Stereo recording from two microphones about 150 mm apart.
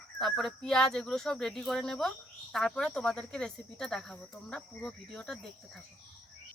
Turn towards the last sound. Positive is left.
turn(degrees=5)  # may be behind; listen again after turning